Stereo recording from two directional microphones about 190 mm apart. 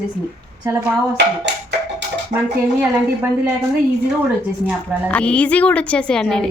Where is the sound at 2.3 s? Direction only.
10° right (ahead or behind).